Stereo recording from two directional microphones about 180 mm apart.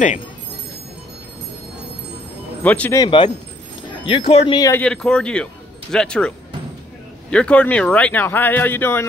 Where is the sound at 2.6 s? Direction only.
10° left (ahead or behind).